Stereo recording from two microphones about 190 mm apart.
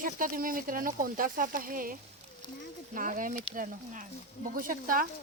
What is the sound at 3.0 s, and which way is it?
Speech, 45° right (ahead or behind).